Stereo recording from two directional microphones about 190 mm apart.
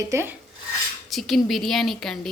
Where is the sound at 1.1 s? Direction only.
Centre (ahead or behind).